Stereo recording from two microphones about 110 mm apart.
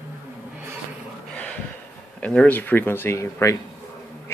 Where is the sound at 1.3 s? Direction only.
10° left (ahead or behind).